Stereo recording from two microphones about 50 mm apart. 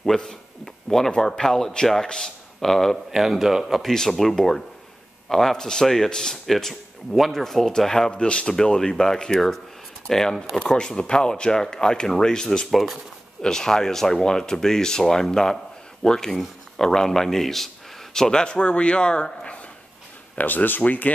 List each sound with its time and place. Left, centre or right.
0.0 s speech: centre
3.1 s speech: centre
8.1 s speech: centre
12.7 s speech: centre
13.4 s speech: centre
20.3 s speech: left